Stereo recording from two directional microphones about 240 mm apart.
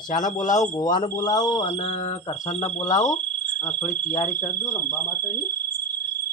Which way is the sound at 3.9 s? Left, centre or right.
Left.